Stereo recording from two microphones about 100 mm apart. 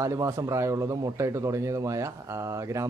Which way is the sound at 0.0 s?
30° right (ahead or behind).